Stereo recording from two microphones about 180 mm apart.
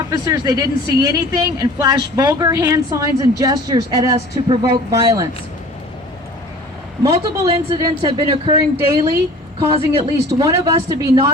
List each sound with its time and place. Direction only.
0.1 s a woman's voice: 20° right (ahead or behind)
7.0 s a woman's voice: 30° right (ahead or behind)